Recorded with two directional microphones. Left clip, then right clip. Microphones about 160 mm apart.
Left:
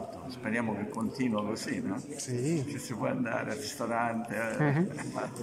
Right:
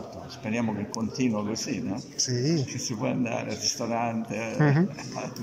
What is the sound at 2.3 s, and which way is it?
Speech, centre (ahead or behind).